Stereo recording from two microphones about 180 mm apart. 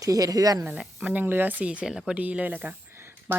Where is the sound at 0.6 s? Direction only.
5° right (ahead or behind).